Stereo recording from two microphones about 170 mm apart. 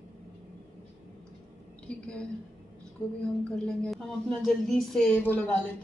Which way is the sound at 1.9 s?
5° left (ahead or behind).